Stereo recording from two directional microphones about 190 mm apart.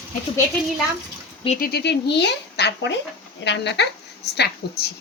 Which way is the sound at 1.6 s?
55° left (ahead or behind).